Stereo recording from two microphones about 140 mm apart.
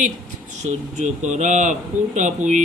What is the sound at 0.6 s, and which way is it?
Speech, 55° right (ahead or behind).